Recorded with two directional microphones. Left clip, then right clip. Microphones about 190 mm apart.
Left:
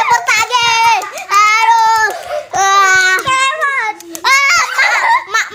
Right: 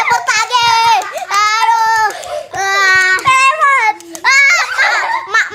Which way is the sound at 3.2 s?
50° right (ahead or behind).